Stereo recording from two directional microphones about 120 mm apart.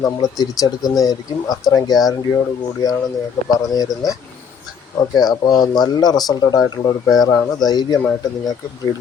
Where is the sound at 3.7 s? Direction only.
30° left (ahead or behind).